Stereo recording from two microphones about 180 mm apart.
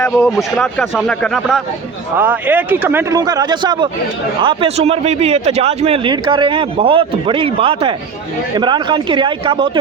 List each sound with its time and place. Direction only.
0.0 s a man's voice: centre (ahead or behind); by 9.6 s 30° right (ahead or behind)